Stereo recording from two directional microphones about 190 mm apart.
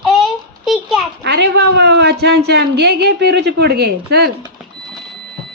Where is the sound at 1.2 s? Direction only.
60° right (ahead or behind).